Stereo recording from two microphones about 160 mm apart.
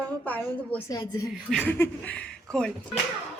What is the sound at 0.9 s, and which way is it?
Speech, 25° left (ahead or behind).